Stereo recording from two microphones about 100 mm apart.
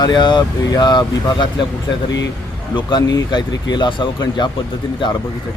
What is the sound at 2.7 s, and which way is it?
Speech, 45° left (ahead or behind).